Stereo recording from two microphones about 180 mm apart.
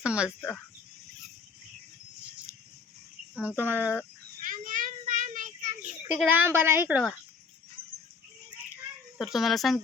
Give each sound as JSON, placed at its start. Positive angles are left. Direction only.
{"t": 0.0, "sound": "a woman's voice", "side_deg": -5}
{"t": 0.3, "sound": "speech", "side_deg": 10}
{"t": 3.6, "sound": "a woman's voice", "side_deg": -10}
{"t": 4.4, "sound": "child singing", "side_deg": -50}
{"t": 6.1, "sound": "a woman's voice", "side_deg": -10}
{"t": 9.1, "sound": "speech", "side_deg": 0}